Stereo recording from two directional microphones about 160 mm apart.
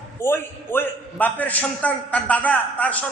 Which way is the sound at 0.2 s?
15° left (ahead or behind).